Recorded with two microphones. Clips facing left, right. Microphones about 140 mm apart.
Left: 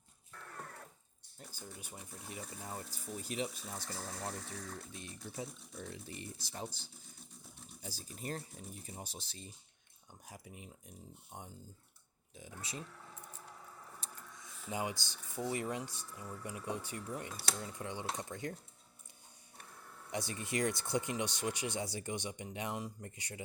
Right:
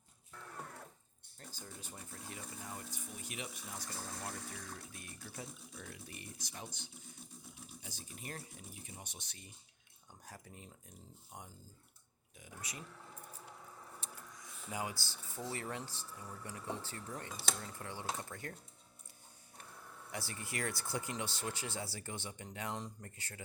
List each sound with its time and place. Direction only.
0.3 s sewing machine: 5° right (ahead or behind)
1.4 s speech: 10° left (ahead or behind); by 3.6 s 35° left (ahead or behind)
3.8 s speech: centre (ahead or behind)
4.9 s speech: 20° left (ahead or behind)
10.2 s speech: 10° left (ahead or behind)
11.3 s speech: 25° left (ahead or behind)
14.0 s a sound: 35° left (ahead or behind)
14.3 s a sound: 25° left (ahead or behind)
15.4 s speech: 15° left (ahead or behind)
20.1 s speech: 20° left (ahead or behind)